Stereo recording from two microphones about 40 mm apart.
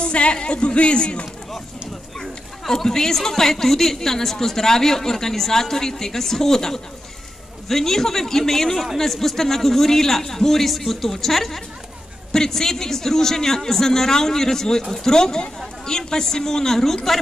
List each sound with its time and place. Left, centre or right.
0.0 s speech: left
2.1 s speech: centre